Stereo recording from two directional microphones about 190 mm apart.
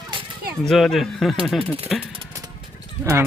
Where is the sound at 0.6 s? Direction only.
Centre (ahead or behind).